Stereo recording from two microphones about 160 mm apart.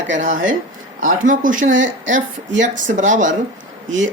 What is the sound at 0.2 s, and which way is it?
A woman's voice, 50° right (ahead or behind).